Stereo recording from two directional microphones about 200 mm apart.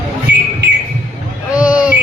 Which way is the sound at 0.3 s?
60° right (ahead or behind).